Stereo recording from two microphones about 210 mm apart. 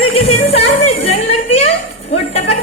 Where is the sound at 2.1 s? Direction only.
30° left (ahead or behind).